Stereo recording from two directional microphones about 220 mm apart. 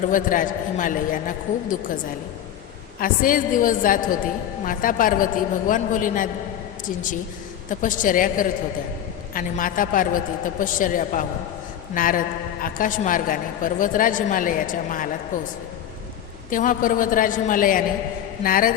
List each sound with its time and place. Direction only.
0.1 s a woman's voice: 40° left (ahead or behind)
3.0 s a woman's voice: 40° left (ahead or behind)
7.7 s a woman's voice: 35° left (ahead or behind)
16.5 s a woman's voice: 40° left (ahead or behind)